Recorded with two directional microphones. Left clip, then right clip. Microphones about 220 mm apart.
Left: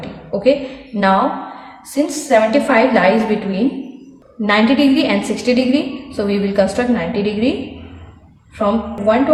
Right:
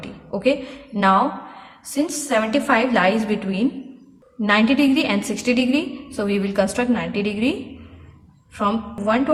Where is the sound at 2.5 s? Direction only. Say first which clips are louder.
Left 6 dB; 25° right (ahead or behind).